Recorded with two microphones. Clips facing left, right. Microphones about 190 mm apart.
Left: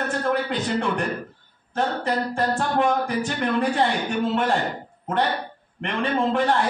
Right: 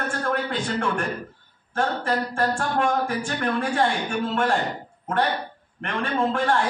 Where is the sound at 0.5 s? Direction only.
20° left (ahead or behind).